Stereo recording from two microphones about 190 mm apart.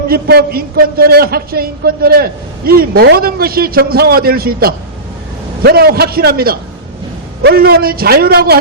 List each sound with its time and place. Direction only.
0.1 s a man's voice: 55° right (ahead or behind)